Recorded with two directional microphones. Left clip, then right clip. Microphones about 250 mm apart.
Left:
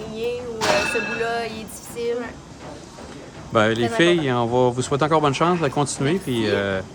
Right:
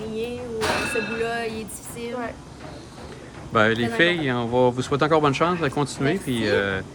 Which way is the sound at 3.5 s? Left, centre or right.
Centre.